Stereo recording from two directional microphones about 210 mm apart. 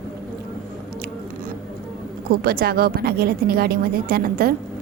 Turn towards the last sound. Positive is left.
turn(degrees=-45)  # may be behind; listen again after turning